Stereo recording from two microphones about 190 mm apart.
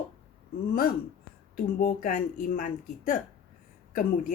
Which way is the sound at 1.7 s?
45° left (ahead or behind).